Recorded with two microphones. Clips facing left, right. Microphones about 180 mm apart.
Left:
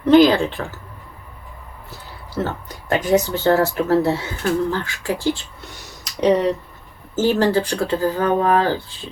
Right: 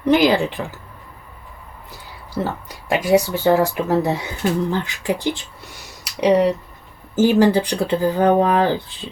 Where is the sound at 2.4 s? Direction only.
10° right (ahead or behind).